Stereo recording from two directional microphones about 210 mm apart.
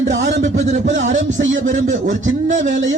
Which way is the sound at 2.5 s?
35° right (ahead or behind).